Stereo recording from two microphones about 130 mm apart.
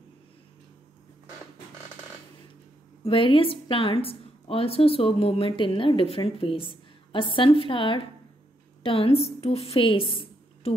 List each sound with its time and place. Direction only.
3.0 s a woman's voice: 45° left (ahead or behind)